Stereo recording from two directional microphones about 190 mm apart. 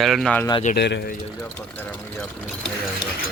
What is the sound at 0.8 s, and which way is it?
Speech, 60° left (ahead or behind).